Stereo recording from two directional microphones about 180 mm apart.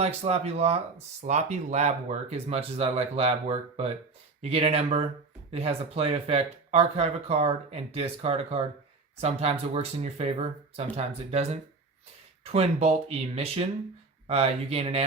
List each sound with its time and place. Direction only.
0.0 s speech: 35° right (ahead or behind)